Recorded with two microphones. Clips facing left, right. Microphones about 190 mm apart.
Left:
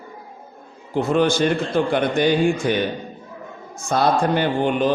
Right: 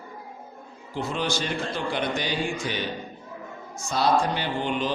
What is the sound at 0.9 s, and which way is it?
A man's voice, 55° left (ahead or behind).